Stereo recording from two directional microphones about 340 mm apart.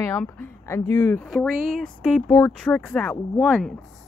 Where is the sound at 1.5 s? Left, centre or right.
Right.